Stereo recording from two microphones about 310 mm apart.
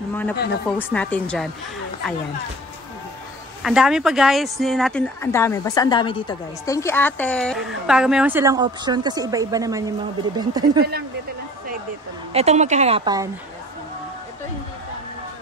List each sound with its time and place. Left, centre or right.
0.7 s speech: centre
3.6 s speech: centre
12.3 s a woman's voice: centre